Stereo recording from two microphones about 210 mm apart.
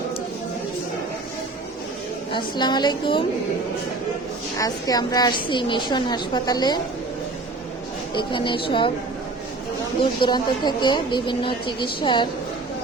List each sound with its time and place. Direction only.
2.3 s speech: 20° left (ahead or behind)
4.5 s speech: 15° left (ahead or behind)
8.1 s speech: 20° left (ahead or behind)
10.0 s speech: 20° left (ahead or behind)